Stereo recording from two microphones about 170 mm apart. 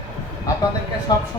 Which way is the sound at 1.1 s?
25° left (ahead or behind).